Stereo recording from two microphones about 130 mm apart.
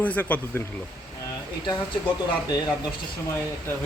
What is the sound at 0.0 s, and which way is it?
Speech, 10° left (ahead or behind).